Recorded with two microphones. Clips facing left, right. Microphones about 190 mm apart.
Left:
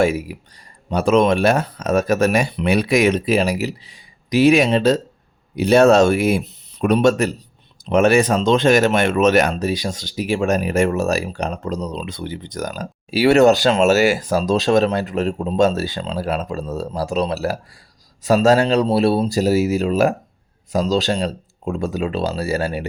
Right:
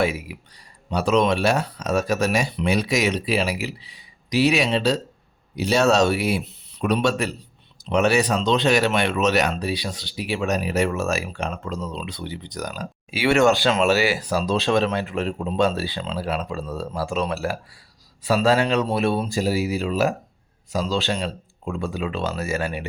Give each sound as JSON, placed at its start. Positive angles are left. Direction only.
{"t": 0.0, "sound": "speech", "side_deg": 45}